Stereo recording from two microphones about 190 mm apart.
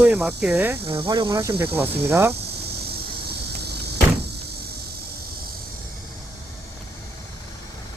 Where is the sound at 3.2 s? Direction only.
60° right (ahead or behind).